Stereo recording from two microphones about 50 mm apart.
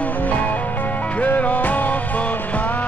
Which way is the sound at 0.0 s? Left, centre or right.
Left.